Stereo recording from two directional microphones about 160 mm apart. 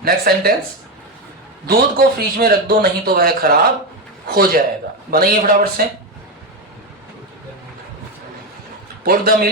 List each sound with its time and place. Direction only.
0.0 s a man's voice: 75° right (ahead or behind)
1.6 s a man's voice: 70° right (ahead or behind)
9.0 s a man's voice: 70° right (ahead or behind)